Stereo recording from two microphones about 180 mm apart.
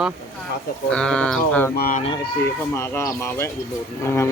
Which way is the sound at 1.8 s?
50° left (ahead or behind).